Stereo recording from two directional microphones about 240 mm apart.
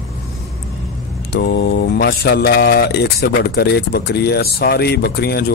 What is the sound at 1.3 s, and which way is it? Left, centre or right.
Speech, left.